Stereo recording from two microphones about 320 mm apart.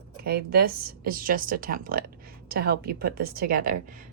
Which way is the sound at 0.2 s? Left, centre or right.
Right.